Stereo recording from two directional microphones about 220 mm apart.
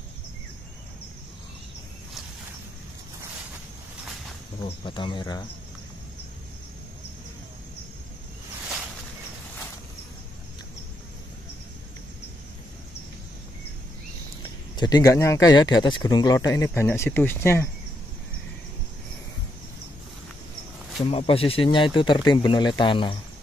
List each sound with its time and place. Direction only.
4.6 s speech: 20° left (ahead or behind)
14.8 s speech: 15° left (ahead or behind)
21.0 s speech: 25° left (ahead or behind)